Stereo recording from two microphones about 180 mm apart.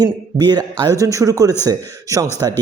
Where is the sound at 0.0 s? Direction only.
20° right (ahead or behind).